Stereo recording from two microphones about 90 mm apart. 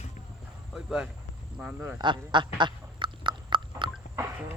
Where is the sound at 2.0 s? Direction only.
60° right (ahead or behind).